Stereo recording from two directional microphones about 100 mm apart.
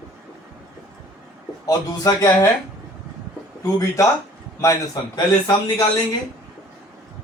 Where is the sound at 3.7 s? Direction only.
30° left (ahead or behind).